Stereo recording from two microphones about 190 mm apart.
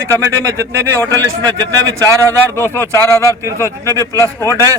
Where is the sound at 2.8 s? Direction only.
15° left (ahead or behind).